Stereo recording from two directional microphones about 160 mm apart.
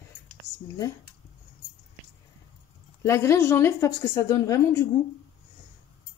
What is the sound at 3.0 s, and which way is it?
Speech, 20° left (ahead or behind).